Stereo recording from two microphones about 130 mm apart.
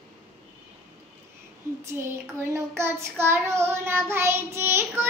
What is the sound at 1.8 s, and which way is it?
Child singing, 20° right (ahead or behind).